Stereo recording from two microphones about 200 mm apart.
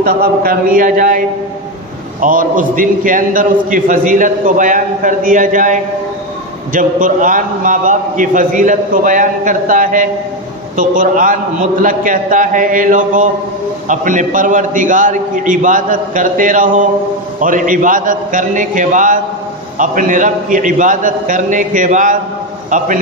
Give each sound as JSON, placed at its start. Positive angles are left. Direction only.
{"t": 0.0, "sound": "speech", "side_deg": -45}
{"t": 2.2, "sound": "a man's voice", "side_deg": -45}